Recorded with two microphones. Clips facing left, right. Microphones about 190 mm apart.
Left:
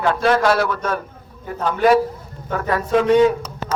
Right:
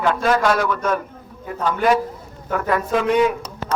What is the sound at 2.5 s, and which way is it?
Speech, 35° left (ahead or behind).